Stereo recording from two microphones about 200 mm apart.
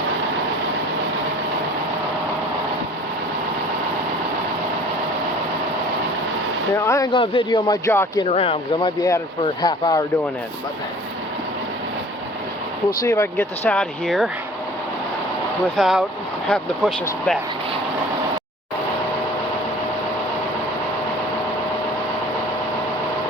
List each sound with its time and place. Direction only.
6.7 s speech: 15° left (ahead or behind)
8.2 s speech: 30° left (ahead or behind)
13.0 s speech: 15° left (ahead or behind)
15.7 s speech: centre (ahead or behind)